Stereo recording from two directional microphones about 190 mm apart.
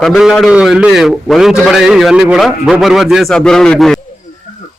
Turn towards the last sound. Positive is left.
turn(degrees=0)  # may be behind; listen again after turning